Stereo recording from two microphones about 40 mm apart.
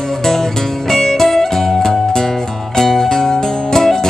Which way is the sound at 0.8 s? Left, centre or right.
Centre.